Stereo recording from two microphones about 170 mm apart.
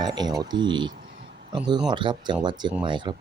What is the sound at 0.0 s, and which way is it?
Speech, 25° right (ahead or behind).